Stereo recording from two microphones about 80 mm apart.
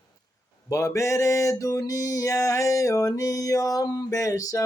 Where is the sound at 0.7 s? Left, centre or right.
Left.